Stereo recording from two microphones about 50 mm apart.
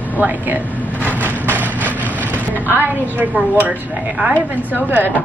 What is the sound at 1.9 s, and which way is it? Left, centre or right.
Vehicle, left.